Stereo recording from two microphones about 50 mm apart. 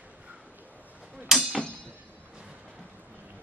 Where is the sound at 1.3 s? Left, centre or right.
Centre.